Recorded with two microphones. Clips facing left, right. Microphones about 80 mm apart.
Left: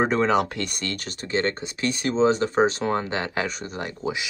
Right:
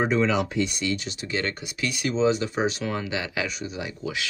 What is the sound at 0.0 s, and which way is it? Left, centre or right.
Speech, left.